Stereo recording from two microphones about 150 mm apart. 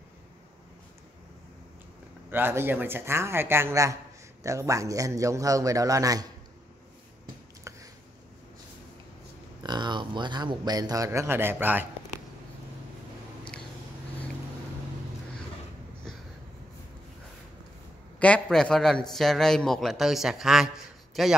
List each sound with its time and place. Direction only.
2.3 s a man's voice: 15° right (ahead or behind)
9.6 s speech: 30° right (ahead or behind); by 11.9 s 10° right (ahead or behind)
18.2 s a man's voice: 5° left (ahead or behind)